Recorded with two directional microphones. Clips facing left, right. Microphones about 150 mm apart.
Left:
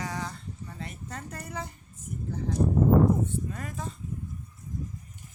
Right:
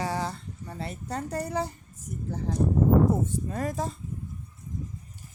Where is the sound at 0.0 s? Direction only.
35° right (ahead or behind).